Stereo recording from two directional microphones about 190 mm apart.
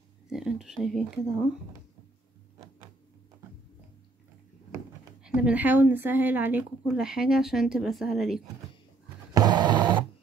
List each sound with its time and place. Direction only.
0.3 s speech: 5° right (ahead or behind)
5.2 s speech: 5° right (ahead or behind)
9.3 s a sound: 20° right (ahead or behind)